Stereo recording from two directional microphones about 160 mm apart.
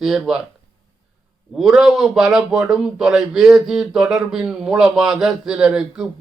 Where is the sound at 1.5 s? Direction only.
Centre (ahead or behind).